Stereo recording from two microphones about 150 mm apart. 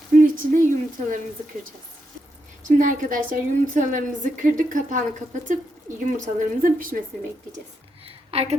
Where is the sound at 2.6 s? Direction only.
65° right (ahead or behind).